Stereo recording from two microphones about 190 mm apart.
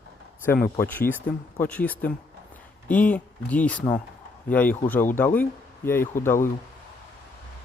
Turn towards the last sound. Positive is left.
turn(degrees=10)  # may be behind; listen again after turning